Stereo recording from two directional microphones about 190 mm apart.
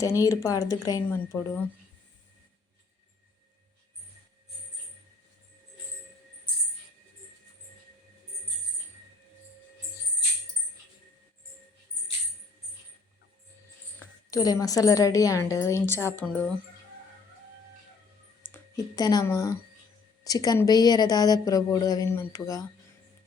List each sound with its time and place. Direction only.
0.0 s a woman's voice: 15° left (ahead or behind)
14.3 s a woman's voice: 20° left (ahead or behind)
18.5 s speech: 20° left (ahead or behind)